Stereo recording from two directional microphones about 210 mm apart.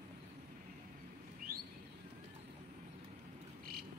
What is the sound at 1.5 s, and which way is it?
Bird, 45° right (ahead or behind).